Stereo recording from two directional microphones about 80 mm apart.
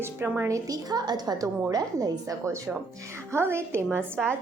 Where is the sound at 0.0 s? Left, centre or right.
Right.